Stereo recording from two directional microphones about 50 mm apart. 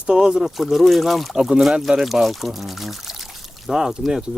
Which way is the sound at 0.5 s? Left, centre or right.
Centre.